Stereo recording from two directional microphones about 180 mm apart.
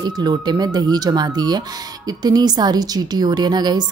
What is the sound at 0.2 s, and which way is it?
Speech, 25° right (ahead or behind).